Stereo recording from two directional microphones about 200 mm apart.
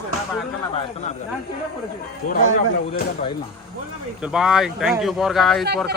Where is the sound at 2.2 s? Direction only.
40° left (ahead or behind).